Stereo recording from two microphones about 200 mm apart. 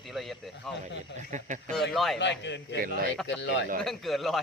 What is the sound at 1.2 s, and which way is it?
Speech, 40° right (ahead or behind).